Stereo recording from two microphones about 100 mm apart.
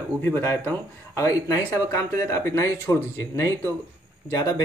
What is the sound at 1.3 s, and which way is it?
Speech, 35° left (ahead or behind).